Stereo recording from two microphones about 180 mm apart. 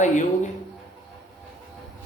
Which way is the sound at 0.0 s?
40° left (ahead or behind).